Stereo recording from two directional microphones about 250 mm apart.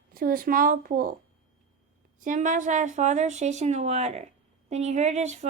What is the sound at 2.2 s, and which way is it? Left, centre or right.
A woman's voice, right.